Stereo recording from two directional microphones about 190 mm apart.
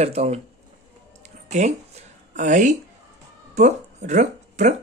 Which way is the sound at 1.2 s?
40° right (ahead or behind).